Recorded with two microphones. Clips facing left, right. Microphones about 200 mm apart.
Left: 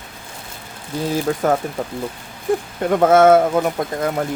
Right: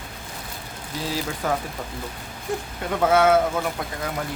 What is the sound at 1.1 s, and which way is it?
Speech, 50° left (ahead or behind).